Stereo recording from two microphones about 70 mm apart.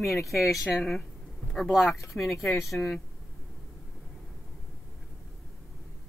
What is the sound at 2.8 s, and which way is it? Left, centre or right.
Speech, left.